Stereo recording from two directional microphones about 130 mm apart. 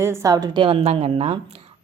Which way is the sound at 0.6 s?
45° right (ahead or behind).